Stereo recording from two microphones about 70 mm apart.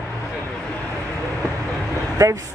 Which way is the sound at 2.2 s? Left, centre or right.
Right.